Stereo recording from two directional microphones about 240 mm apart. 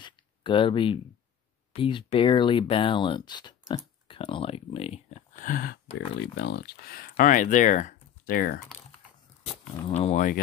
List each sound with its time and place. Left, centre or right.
0.0 s a sound: left
1.7 s speech: left
9.4 s speech: left